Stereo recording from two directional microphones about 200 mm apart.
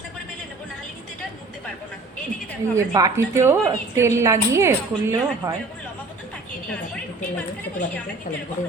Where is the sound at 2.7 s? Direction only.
15° right (ahead or behind).